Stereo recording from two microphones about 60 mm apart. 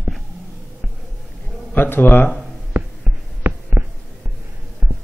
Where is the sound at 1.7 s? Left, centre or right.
Left.